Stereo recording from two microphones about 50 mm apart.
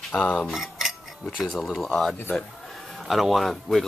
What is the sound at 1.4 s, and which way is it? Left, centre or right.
Speech, centre.